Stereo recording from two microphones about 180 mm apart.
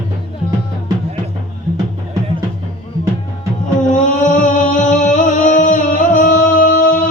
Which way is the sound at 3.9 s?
45° left (ahead or behind).